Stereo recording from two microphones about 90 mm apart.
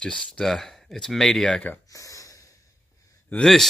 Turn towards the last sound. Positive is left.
turn(degrees=5)  # may be behind; listen again after turning